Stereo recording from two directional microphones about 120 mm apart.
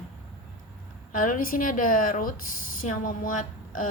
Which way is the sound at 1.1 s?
90° left.